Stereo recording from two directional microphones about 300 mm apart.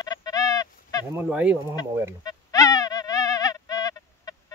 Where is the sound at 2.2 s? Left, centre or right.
Centre.